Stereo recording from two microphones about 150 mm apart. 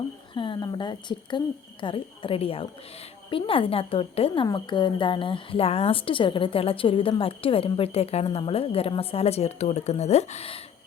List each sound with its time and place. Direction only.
0.3 s a woman's voice: 35° left (ahead or behind)